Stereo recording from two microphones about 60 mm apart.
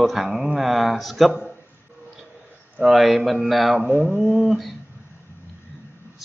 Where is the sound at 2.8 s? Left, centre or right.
Centre.